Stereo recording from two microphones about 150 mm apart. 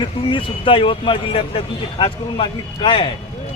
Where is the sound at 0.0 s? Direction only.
35° left (ahead or behind).